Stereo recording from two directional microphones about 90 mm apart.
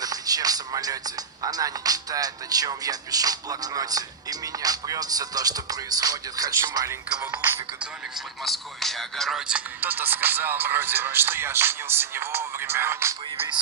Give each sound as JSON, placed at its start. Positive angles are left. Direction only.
{"t": 0.0, "sound": "speech", "side_deg": -45}
{"t": 7.8, "sound": "speech", "side_deg": 0}
{"t": 9.5, "sound": "speech", "side_deg": -20}